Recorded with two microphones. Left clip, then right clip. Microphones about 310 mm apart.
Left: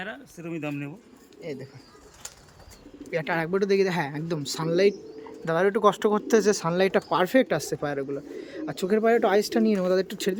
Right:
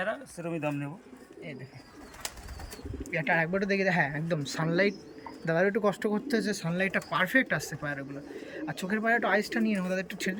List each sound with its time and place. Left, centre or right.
0.0 s speech: centre
3.1 s speech: centre
6.3 s speech: left
6.7 s speech: centre